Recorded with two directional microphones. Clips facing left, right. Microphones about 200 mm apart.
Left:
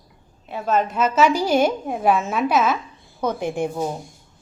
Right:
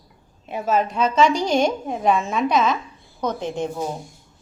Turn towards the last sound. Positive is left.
turn(degrees=10)  # may be behind; listen again after turning